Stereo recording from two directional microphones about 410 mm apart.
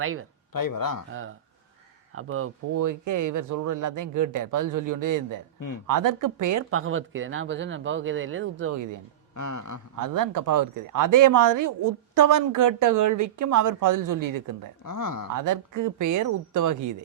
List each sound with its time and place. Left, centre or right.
0.0 s speech: right
0.5 s a sound: left
2.1 s speech: right
2.7 s speech: right
5.5 s speech: left
5.9 s speech: right
8.7 s speech: right
9.3 s a sound: left
9.9 s speech: right
14.8 s a sound: left
15.3 s speech: right